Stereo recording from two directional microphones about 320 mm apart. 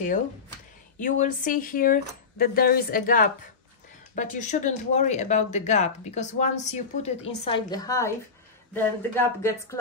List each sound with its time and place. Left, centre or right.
0.9 s speech: left; by 9.8 s centre